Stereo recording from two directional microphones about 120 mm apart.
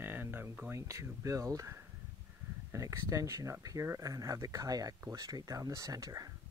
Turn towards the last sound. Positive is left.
turn(degrees=-30)  # may be behind; listen again after turning